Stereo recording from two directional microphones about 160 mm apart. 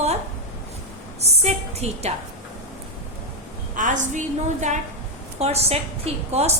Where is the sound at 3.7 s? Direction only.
50° right (ahead or behind).